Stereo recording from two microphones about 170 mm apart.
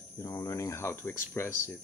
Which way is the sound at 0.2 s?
20° left (ahead or behind).